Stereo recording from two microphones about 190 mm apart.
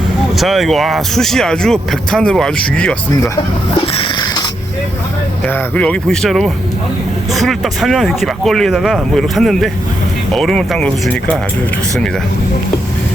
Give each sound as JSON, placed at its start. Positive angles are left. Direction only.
{"t": 0.3, "sound": "speech", "side_deg": 0}
{"t": 3.8, "sound": "a sound", "side_deg": 25}
{"t": 5.5, "sound": "speech", "side_deg": 5}